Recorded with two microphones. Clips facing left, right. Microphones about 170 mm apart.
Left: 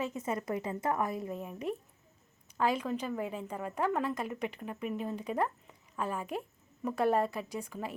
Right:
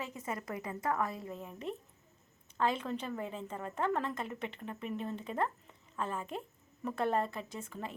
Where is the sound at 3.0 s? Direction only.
10° left (ahead or behind).